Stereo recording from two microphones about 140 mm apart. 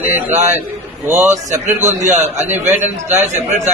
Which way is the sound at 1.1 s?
55° right (ahead or behind).